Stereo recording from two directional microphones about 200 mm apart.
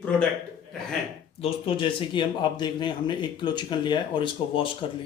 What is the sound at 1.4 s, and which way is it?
Speech, 25° left (ahead or behind).